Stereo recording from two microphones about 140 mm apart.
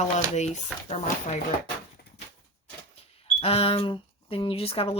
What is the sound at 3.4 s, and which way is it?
Speech, 40° left (ahead or behind).